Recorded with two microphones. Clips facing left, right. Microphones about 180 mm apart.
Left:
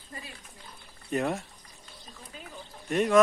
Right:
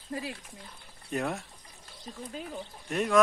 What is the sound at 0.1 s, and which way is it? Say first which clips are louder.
Speech: right 9 dB; 75° right (ahead or behind).